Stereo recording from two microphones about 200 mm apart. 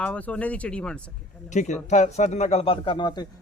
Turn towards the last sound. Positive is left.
turn(degrees=20)  # may be behind; listen again after turning